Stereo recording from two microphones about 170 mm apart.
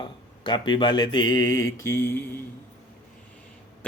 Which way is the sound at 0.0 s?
30° left (ahead or behind).